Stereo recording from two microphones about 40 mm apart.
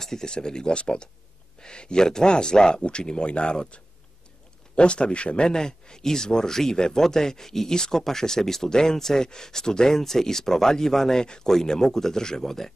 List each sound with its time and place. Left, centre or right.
0.0 s speech: centre